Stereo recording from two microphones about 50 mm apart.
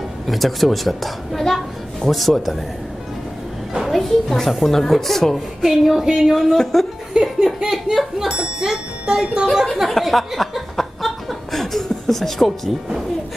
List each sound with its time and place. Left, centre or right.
0.3 s a child's voice: centre
3.8 s a child's voice: centre
6.0 s speech: centre
6.3 s a child's voice: centre
9.8 s chuckle: centre